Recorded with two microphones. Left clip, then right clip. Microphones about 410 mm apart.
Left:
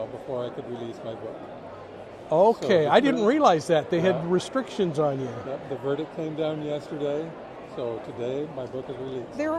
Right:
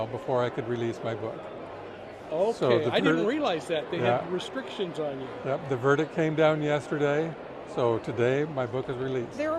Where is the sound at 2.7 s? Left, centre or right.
Left.